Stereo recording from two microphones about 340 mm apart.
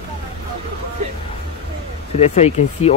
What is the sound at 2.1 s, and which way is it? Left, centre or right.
Speech, centre.